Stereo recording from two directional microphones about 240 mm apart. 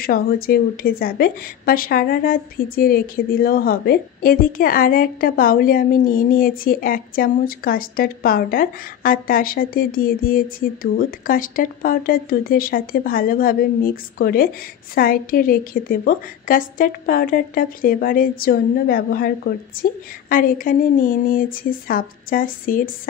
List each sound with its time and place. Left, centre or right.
0.0 s a woman's voice: left